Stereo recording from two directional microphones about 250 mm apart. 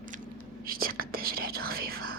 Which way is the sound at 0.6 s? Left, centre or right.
Right.